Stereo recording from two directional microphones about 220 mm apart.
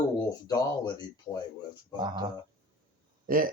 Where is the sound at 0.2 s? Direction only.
15° left (ahead or behind).